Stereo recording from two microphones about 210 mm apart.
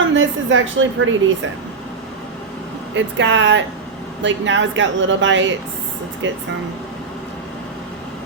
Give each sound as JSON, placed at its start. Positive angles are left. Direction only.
{"t": 0.1, "sound": "speech", "side_deg": -65}
{"t": 2.9, "sound": "speech", "side_deg": -60}